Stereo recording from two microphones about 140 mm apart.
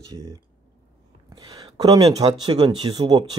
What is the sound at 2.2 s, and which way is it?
Speech, 30° right (ahead or behind).